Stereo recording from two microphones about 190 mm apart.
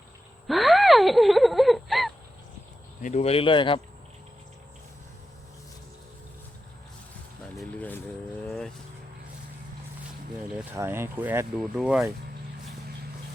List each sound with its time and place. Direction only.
0.4 s gasp: centre (ahead or behind)
3.0 s speech: 35° left (ahead or behind)
7.5 s vehicle: 5° left (ahead or behind)
10.6 s speech: 10° right (ahead or behind)